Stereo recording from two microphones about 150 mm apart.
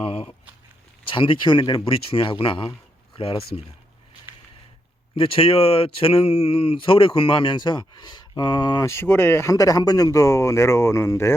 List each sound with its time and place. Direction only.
0.0 s speech: 40° left (ahead or behind)
2.6 s a sound: 35° left (ahead or behind)
5.1 s speech: 35° left (ahead or behind)
8.9 s speech: 15° left (ahead or behind)